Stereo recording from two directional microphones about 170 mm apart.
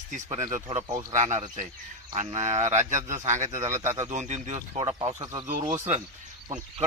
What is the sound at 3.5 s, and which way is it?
Speech, 15° right (ahead or behind).